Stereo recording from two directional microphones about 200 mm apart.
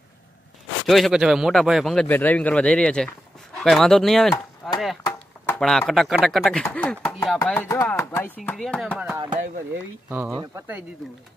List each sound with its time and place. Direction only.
0.8 s speech: centre (ahead or behind)
4.6 s chop: centre (ahead or behind)
5.6 s speech: centre (ahead or behind)
8.4 s speech: 5° left (ahead or behind)
9.1 s speech: 20° right (ahead or behind)
10.0 s speech: 10° right (ahead or behind)